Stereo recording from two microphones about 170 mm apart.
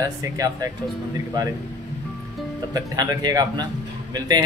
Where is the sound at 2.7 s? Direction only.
20° right (ahead or behind).